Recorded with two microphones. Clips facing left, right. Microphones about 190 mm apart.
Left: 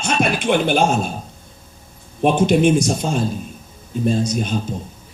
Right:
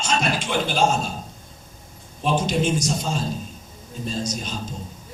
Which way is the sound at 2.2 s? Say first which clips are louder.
Left 8 dB; 55° left (ahead or behind).